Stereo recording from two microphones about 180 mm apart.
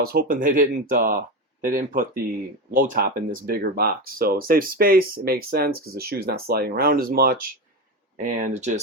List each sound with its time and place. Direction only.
0.0 s speech: 55° right (ahead or behind); by 8.8 s 40° right (ahead or behind)